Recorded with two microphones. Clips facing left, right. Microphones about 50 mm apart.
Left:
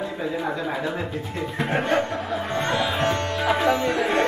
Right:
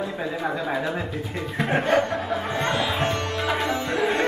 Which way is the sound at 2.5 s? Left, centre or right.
Centre.